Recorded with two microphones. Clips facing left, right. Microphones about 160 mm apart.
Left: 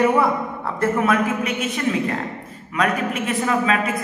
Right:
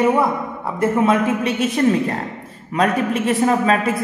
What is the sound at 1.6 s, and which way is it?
A man's voice, 40° right (ahead or behind).